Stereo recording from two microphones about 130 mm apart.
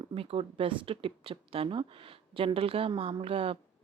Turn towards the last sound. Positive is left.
turn(degrees=-45)  # may be behind; listen again after turning